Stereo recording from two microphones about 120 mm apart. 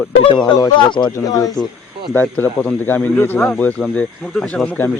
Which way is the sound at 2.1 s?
15° left (ahead or behind).